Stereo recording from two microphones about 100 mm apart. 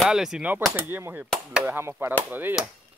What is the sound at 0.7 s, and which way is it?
Speech, 25° right (ahead or behind).